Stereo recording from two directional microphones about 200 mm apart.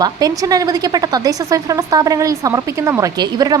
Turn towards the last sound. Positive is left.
turn(degrees=-20)  # may be behind; listen again after turning